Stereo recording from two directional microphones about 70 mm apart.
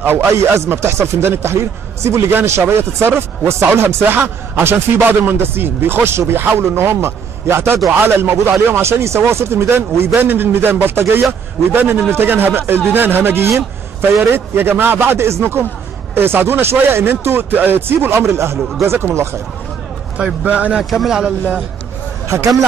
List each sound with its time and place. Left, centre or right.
0.3 s speech: right
20.2 s a man's voice: centre
20.9 s speech: centre